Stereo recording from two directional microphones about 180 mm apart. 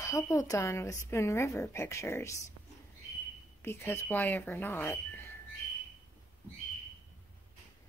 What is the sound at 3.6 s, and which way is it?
Speech, 15° left (ahead or behind).